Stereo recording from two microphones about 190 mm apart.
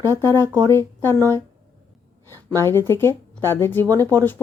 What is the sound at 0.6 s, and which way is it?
Speech, 10° left (ahead or behind).